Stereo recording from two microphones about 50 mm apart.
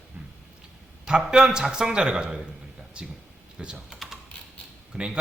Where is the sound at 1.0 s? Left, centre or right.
Centre.